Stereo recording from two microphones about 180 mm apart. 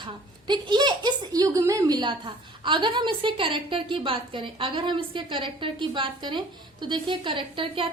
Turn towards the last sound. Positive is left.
turn(degrees=-30)  # may be behind; listen again after turning